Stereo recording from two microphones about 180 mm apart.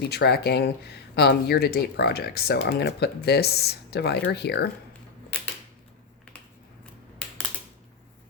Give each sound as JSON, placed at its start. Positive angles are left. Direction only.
{"t": 0.0, "sound": "speech", "side_deg": 65}
{"t": 5.3, "sound": "typewriter", "side_deg": 5}